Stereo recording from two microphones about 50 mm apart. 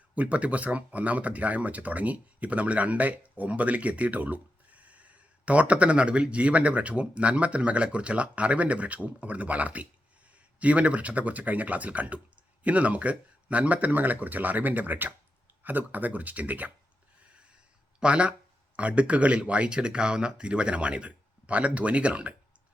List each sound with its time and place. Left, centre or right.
0.1 s speech: right
17.2 s a sound: right
18.0 s speech: right